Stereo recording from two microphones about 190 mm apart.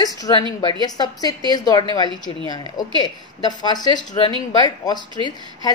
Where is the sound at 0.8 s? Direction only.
20° left (ahead or behind).